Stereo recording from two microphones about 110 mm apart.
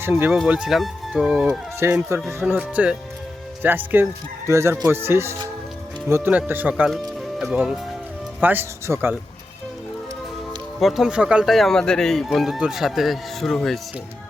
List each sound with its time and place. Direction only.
0.0 s speech: 20° right (ahead or behind)
0.3 s speech: 5° right (ahead or behind)
1.8 s speech: 20° right (ahead or behind)
8.4 s speech: 15° right (ahead or behind)
10.8 s speech: centre (ahead or behind)
11.5 s speech: 5° left (ahead or behind)